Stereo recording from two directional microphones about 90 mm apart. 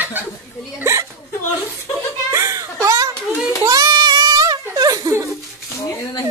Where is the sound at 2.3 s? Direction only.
35° right (ahead or behind).